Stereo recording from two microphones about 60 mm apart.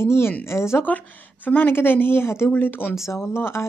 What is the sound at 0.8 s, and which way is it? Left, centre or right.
Speech, left.